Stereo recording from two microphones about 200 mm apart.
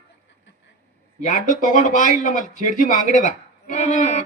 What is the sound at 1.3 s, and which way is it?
Speech, 40° left (ahead or behind).